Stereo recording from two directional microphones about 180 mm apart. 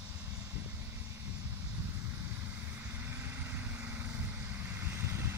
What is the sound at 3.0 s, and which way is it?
Vehicle, 10° right (ahead or behind).